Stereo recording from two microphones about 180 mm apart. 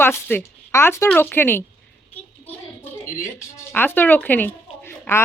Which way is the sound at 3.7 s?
10° left (ahead or behind).